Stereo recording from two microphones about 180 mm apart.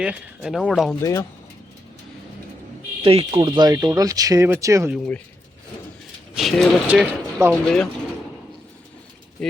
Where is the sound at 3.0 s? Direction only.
30° right (ahead or behind).